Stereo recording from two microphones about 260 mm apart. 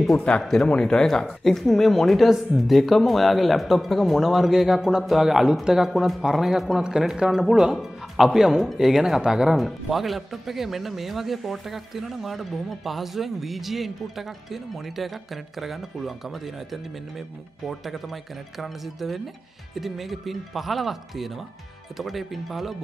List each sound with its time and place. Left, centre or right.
0.0 s speech: centre